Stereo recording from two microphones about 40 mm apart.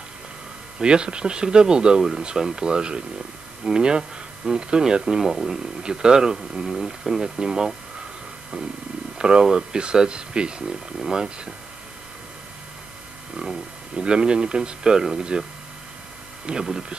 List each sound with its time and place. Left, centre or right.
0.7 s speech: right; by 5.6 s centre
5.6 s speech: centre
9.2 s speech: right
13.4 s speech: centre
16.4 s speech: centre